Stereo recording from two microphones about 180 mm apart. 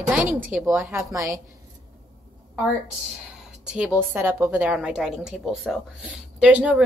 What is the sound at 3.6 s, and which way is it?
A woman's voice, 5° right (ahead or behind).